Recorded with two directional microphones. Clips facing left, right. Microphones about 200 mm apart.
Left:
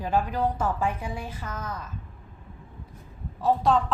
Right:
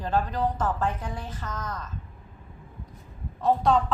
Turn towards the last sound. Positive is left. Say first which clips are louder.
# even
turn(degrees=0)  # may be behind; listen again after turning